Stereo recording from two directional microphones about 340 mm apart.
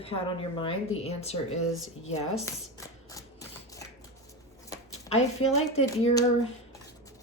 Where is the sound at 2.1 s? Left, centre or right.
Centre.